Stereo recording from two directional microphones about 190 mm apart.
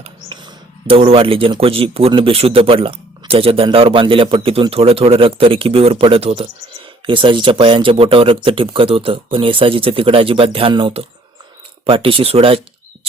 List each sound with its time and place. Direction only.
0.0 s speech: 25° right (ahead or behind)